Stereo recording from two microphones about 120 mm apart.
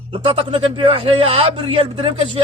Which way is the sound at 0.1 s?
50° right (ahead or behind).